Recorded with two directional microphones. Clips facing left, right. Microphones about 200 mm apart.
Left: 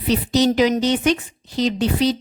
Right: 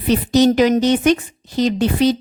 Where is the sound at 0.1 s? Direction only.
50° right (ahead or behind).